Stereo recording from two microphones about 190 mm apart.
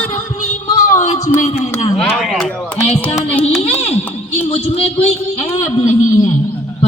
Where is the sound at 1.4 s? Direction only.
35° left (ahead or behind).